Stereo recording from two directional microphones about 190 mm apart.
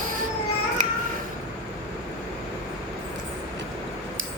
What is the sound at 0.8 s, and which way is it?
Music, 40° right (ahead or behind).